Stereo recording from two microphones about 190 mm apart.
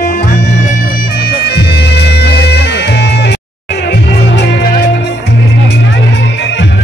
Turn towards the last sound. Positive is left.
turn(degrees=65)  # may be behind; listen again after turning